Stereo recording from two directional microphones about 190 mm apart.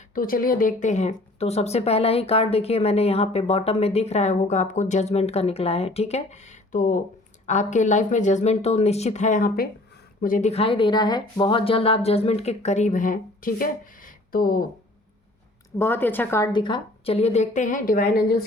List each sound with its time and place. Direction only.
0.1 s speech: 50° left (ahead or behind)
15.8 s speech: 10° left (ahead or behind); by 18.3 s 55° left (ahead or behind)